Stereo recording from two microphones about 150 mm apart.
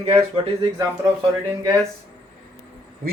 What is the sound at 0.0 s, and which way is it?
Speech, 40° right (ahead or behind).